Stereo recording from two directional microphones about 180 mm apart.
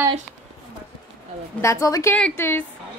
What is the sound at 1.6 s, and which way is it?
Speech, 15° left (ahead or behind).